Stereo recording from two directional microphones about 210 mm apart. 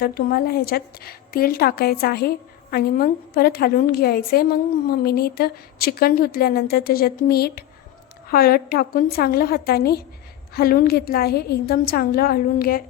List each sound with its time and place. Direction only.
0.0 s a woman's voice: 45° left (ahead or behind)